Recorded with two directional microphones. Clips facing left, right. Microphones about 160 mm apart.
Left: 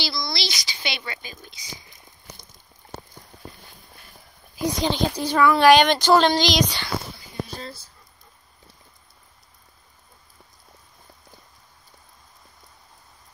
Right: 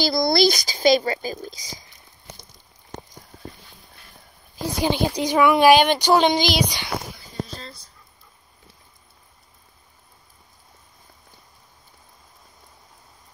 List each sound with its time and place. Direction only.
0.0 s speech: 50° right (ahead or behind)
4.7 s speech: 10° right (ahead or behind)
7.4 s speech: 5° left (ahead or behind)